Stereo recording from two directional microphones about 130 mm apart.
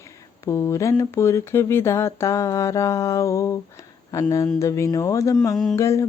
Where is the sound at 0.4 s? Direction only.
20° left (ahead or behind).